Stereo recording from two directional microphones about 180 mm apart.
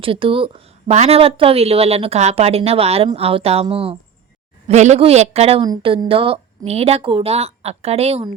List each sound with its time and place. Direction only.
0.0 s speech: 30° right (ahead or behind)